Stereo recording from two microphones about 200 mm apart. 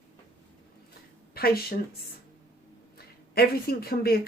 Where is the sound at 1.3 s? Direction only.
50° left (ahead or behind).